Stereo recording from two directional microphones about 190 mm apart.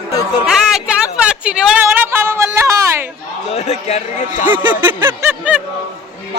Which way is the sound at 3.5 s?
35° left (ahead or behind).